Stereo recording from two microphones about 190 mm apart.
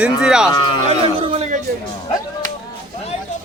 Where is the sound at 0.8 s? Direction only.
30° right (ahead or behind).